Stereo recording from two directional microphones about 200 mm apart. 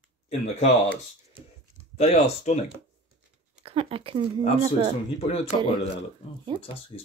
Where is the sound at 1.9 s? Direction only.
30° left (ahead or behind).